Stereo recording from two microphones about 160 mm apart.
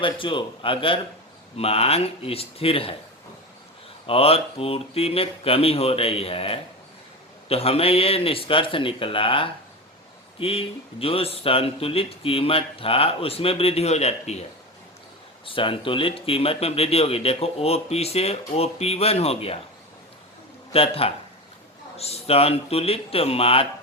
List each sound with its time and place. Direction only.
0.0 s speech: 30° left (ahead or behind)
4.0 s speech: 35° left (ahead or behind)
15.4 s speech: 35° left (ahead or behind)
20.7 s speech: 35° left (ahead or behind)